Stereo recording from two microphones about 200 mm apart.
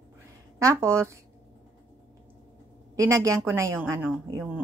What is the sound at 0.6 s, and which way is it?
Speech, 15° right (ahead or behind).